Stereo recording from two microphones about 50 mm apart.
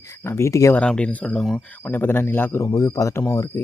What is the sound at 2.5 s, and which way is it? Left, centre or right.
Speech, left.